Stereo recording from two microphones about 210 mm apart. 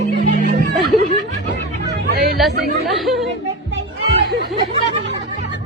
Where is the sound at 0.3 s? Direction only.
40° right (ahead or behind).